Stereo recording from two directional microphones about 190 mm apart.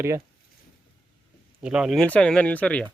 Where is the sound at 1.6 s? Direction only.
5° right (ahead or behind).